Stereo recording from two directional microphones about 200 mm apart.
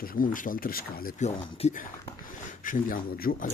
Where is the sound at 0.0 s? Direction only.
45° left (ahead or behind).